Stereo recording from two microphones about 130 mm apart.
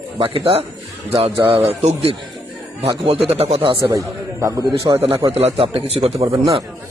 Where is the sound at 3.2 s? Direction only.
50° right (ahead or behind).